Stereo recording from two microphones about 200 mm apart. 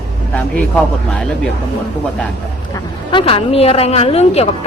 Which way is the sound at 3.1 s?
25° left (ahead or behind).